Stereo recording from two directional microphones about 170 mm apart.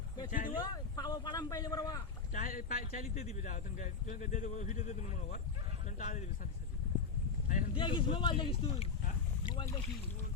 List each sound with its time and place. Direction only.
0.3 s speech: 55° left (ahead or behind)
0.6 s speech: 25° left (ahead or behind)
2.3 s speech: 50° left (ahead or behind)
7.8 s speech: 30° left (ahead or behind)